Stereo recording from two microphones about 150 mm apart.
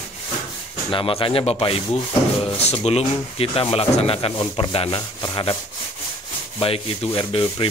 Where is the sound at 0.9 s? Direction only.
35° left (ahead or behind).